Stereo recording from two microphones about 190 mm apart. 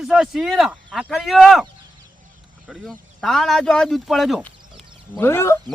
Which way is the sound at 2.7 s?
Centre (ahead or behind).